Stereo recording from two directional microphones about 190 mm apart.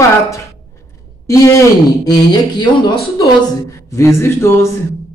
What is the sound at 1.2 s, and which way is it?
Speech, 15° left (ahead or behind).